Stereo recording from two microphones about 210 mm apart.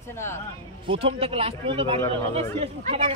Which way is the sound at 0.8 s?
25° right (ahead or behind).